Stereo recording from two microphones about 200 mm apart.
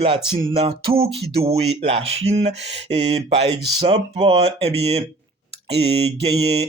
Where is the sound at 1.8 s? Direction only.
30° right (ahead or behind).